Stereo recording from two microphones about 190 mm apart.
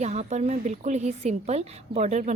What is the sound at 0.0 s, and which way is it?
A woman's voice, 35° right (ahead or behind).